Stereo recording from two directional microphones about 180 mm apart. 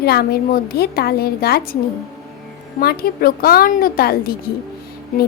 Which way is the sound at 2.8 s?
55° left (ahead or behind).